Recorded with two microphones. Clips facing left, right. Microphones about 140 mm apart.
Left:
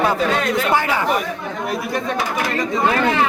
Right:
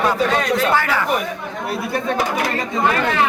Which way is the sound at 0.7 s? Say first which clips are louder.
Even; 15° left (ahead or behind).